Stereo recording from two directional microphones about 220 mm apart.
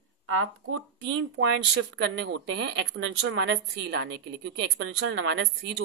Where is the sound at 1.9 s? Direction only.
60° right (ahead or behind).